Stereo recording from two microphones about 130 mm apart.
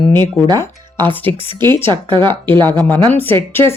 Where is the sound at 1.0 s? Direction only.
15° left (ahead or behind).